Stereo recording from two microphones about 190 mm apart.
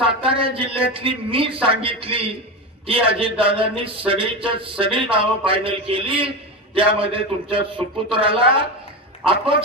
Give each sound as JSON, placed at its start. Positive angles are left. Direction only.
{"t": 0.0, "sound": "a man's voice", "side_deg": -30}